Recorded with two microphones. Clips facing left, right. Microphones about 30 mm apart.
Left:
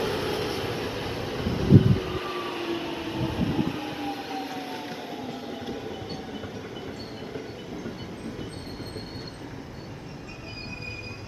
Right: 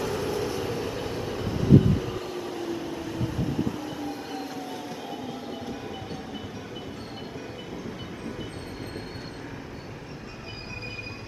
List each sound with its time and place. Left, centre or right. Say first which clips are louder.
0.0 s train: left 1 dB; left
5.2 s train: even; centre